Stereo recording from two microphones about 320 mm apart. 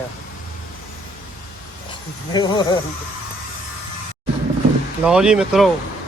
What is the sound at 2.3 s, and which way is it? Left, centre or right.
Speech, centre.